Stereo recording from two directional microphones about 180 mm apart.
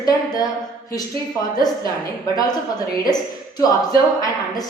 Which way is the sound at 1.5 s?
20° left (ahead or behind).